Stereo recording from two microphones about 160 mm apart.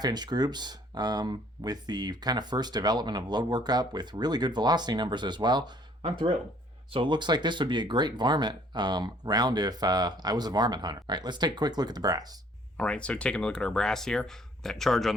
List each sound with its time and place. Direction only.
0.0 s speech: 25° right (ahead or behind)
12.7 s speech: 5° left (ahead or behind)